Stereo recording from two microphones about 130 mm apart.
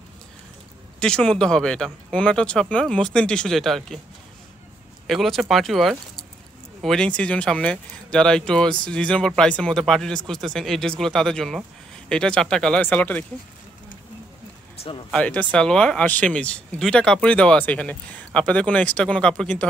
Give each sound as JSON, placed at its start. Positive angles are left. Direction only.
{"t": 0.9, "sound": "speech", "side_deg": 5}
{"t": 5.0, "sound": "speech", "side_deg": 0}
{"t": 15.0, "sound": "speech", "side_deg": 10}